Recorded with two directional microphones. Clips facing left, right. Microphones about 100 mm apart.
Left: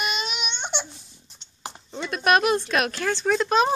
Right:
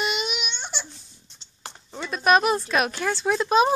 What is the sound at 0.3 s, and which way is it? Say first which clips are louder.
Baby cry: left 2 dB; centre (ahead or behind).